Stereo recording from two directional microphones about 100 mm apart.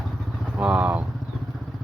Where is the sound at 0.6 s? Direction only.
10° right (ahead or behind).